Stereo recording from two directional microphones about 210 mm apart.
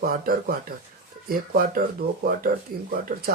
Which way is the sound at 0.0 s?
45° right (ahead or behind).